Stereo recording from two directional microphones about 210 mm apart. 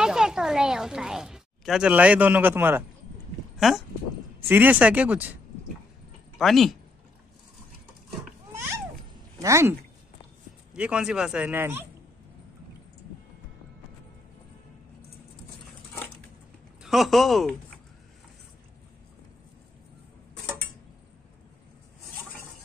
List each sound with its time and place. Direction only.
0.0 s a woman's voice: 5° right (ahead or behind)
6.3 s speech: centre (ahead or behind)
9.4 s speech: 15° right (ahead or behind)
16.8 s speech: centre (ahead or behind)